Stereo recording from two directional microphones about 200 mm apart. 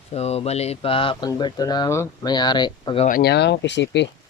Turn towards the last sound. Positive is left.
turn(degrees=60)  # may be behind; listen again after turning